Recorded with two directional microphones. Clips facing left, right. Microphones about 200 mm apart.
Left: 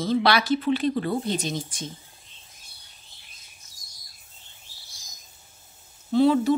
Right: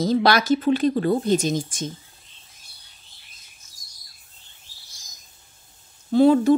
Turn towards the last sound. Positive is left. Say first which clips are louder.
# right 4 dB
turn(degrees=-50)  # may be behind; listen again after turning